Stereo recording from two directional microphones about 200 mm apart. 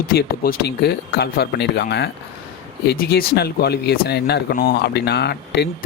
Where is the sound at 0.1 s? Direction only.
50° left (ahead or behind).